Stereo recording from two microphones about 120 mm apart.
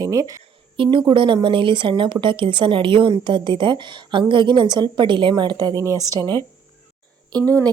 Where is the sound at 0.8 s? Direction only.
40° right (ahead or behind).